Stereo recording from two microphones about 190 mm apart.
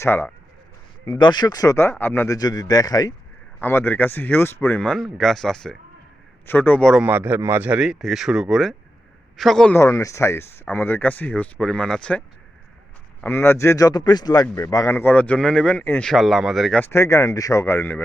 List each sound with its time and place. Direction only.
0.0 s speech: 10° left (ahead or behind)
7.0 s speech: 10° right (ahead or behind)
9.8 s speech: 15° left (ahead or behind)
13.2 s speech: 10° left (ahead or behind)